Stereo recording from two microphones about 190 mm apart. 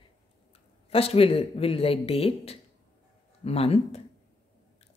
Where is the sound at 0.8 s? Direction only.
30° left (ahead or behind).